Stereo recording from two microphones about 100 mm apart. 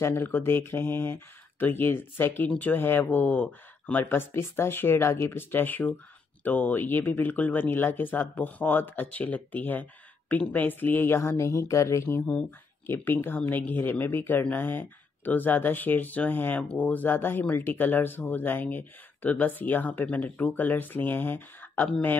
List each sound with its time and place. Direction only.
0.0 s speech: 25° left (ahead or behind)